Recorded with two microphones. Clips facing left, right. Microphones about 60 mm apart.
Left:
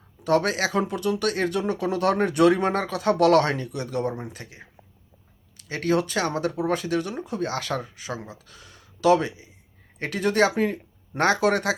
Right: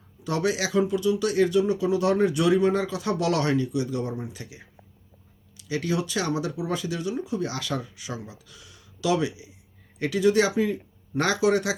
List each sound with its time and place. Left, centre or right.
0.3 s speech: left